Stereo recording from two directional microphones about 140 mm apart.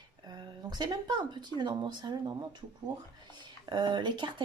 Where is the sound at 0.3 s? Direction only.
30° right (ahead or behind).